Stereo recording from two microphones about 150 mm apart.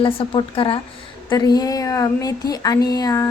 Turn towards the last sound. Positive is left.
turn(degrees=25)  # may be behind; listen again after turning